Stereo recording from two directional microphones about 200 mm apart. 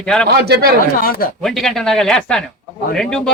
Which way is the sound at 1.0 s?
45° left (ahead or behind).